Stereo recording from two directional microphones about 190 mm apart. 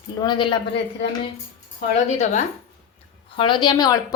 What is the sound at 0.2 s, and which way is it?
Speech, 25° left (ahead or behind).